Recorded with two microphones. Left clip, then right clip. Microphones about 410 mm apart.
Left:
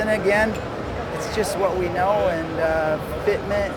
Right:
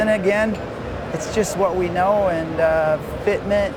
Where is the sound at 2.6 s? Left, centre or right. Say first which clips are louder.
Right 5 dB; right.